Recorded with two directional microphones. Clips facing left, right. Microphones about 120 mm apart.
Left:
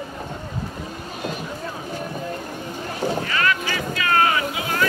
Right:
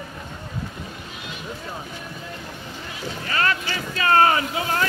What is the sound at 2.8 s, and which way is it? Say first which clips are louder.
Boat: left 10 dB; 45° left (ahead or behind).